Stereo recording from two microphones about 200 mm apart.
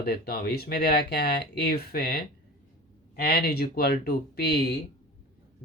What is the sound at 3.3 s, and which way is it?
Speech, 50° left (ahead or behind).